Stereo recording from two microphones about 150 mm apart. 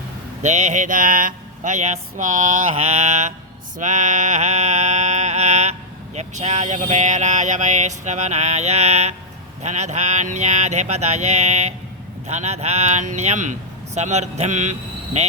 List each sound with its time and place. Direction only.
0.4 s mantra: 50° right (ahead or behind)
2.7 s speech: 45° right (ahead or behind)
3.8 s a sound: 55° right (ahead or behind)
6.1 s speech: 50° right (ahead or behind)